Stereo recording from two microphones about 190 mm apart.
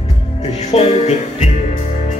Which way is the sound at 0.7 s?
35° left (ahead or behind).